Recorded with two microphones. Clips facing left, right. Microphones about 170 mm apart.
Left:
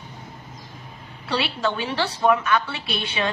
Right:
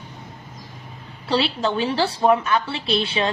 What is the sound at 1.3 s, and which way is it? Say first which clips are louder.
A woman's voice: right 3 dB; 30° right (ahead or behind).